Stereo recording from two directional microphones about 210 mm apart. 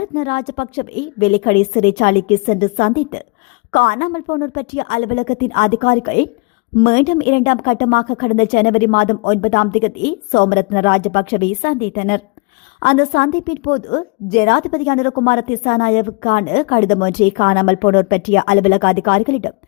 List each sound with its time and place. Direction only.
0.2 s a woman's voice: 40° left (ahead or behind)